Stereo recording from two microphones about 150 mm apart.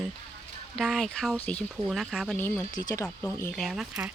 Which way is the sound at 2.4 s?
15° left (ahead or behind).